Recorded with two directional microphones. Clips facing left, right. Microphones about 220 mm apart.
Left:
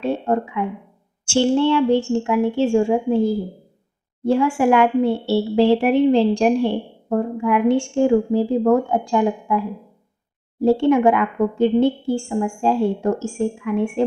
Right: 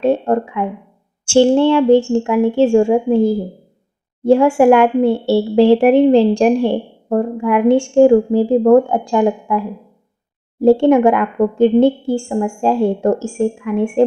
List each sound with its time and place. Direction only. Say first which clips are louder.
0.0 s a woman's voice: right 6 dB; 50° right (ahead or behind)